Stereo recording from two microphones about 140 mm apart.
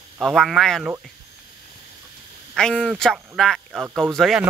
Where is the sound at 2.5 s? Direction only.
5° left (ahead or behind).